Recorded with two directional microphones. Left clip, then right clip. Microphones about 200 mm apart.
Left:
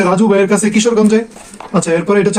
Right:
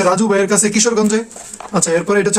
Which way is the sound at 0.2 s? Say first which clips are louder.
Left 3 dB; centre (ahead or behind).